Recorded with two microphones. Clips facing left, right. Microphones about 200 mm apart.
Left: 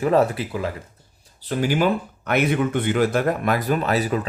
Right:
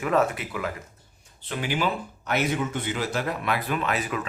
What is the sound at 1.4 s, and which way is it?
Speech, 40° left (ahead or behind).